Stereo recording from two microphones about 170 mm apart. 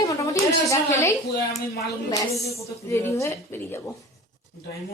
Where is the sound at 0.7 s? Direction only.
15° left (ahead or behind).